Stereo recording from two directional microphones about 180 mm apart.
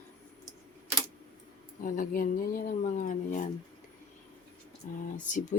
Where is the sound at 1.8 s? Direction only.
50° left (ahead or behind).